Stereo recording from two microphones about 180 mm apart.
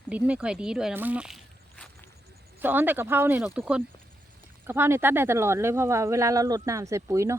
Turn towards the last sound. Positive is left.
turn(degrees=-15)  # may be behind; listen again after turning